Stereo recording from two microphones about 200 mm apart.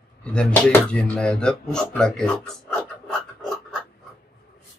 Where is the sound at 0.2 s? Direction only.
5° left (ahead or behind).